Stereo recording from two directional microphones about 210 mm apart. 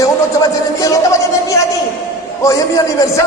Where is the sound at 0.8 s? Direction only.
15° left (ahead or behind).